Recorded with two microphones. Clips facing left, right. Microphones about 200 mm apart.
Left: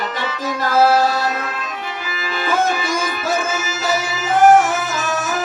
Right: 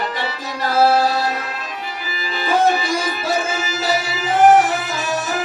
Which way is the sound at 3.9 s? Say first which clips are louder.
Left 1 dB; 45° left (ahead or behind).